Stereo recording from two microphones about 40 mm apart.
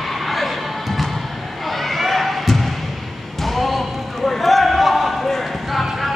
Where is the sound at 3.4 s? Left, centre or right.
Centre.